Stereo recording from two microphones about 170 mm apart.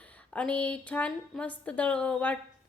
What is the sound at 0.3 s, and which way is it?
A woman's voice, 5° left (ahead or behind).